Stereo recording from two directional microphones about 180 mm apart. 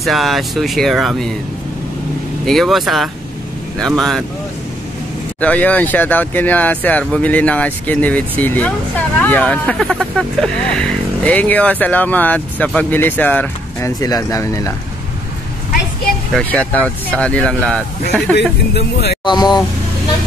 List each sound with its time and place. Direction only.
0.0 s speech: centre (ahead or behind)
2.4 s speech: centre (ahead or behind)
5.4 s speech: 10° left (ahead or behind)
16.3 s speech: 10° left (ahead or behind)
18.7 s speech: 70° left (ahead or behind)
19.2 s speech: 25° left (ahead or behind)